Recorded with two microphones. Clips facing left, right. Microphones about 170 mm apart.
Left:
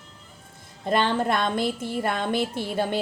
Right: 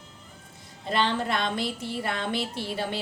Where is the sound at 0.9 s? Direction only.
50° left (ahead or behind).